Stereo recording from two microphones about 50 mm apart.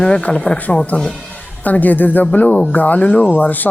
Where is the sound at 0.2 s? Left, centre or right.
Left.